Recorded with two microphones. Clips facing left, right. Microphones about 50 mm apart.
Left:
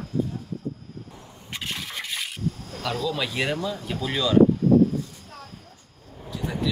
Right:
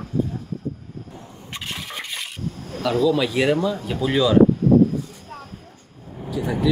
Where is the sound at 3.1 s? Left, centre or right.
Centre.